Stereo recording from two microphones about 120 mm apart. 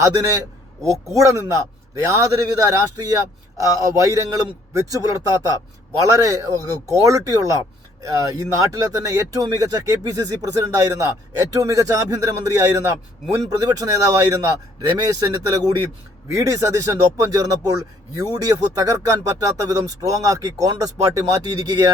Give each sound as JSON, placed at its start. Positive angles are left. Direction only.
{"t": 1.1, "sound": "speech", "side_deg": -30}